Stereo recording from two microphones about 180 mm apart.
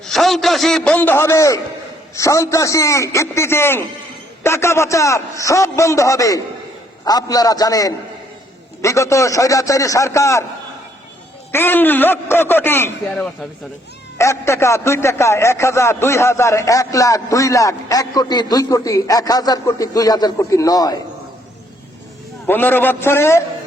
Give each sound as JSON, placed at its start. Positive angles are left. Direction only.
{"t": 0.0, "sound": "a man's voice", "side_deg": 0}
{"t": 11.5, "sound": "a man's voice", "side_deg": 10}
{"t": 14.2, "sound": "a man's voice", "side_deg": 15}
{"t": 22.4, "sound": "a man's voice", "side_deg": 10}